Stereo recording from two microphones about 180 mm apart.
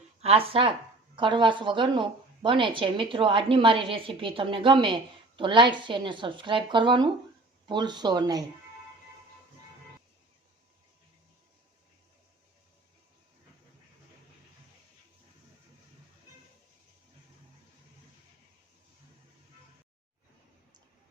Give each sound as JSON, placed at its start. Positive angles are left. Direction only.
{"t": 0.2, "sound": "a woman's voice", "side_deg": -35}